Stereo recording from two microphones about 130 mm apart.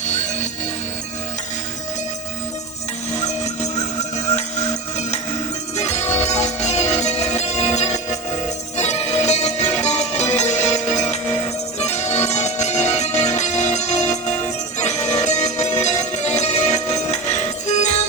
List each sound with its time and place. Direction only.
3.2 s music: 60° left (ahead or behind)
5.7 s music: 55° left (ahead or behind)